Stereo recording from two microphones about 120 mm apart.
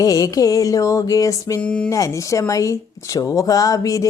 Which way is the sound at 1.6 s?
10° left (ahead or behind).